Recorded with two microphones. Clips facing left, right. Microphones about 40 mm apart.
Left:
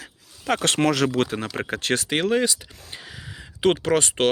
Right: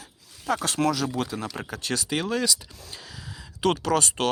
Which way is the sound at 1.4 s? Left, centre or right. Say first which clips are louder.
Left 5 dB; left.